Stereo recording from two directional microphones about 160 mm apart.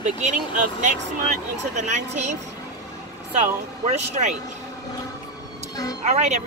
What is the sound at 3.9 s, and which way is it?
Speech, 45° right (ahead or behind).